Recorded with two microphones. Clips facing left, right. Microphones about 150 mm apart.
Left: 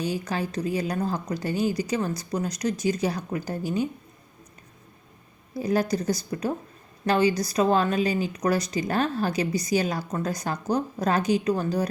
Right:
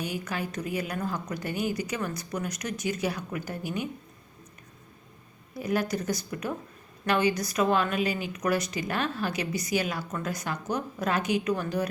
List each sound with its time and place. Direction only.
0.0 s a woman's voice: 35° left (ahead or behind)
5.5 s a woman's voice: 35° left (ahead or behind)